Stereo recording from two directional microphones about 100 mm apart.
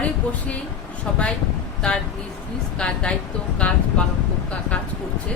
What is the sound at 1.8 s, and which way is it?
Speech, 10° left (ahead or behind).